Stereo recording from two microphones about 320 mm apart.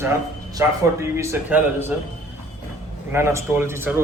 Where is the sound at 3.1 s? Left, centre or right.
Centre.